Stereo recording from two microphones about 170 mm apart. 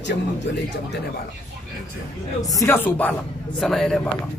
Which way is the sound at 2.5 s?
20° left (ahead or behind).